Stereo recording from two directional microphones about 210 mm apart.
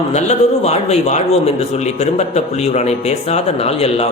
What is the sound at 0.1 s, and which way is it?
A man's voice, 30° left (ahead or behind).